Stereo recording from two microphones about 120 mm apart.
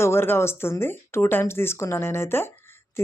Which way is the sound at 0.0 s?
20° left (ahead or behind).